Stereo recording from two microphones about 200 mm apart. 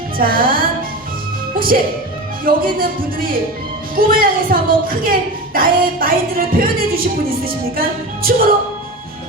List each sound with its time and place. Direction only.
0.2 s music: 45° right (ahead or behind)